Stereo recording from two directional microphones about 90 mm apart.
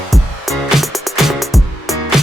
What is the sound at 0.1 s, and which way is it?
Music, centre (ahead or behind).